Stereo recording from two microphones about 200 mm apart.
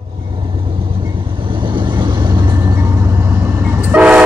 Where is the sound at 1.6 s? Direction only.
25° right (ahead or behind).